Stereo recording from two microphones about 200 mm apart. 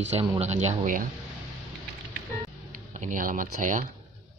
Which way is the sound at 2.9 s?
40° right (ahead or behind).